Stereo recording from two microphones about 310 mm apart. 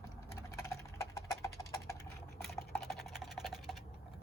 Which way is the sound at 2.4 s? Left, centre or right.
Centre.